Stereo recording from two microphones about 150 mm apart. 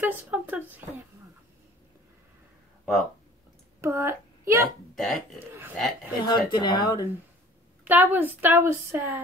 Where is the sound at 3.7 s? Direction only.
20° right (ahead or behind).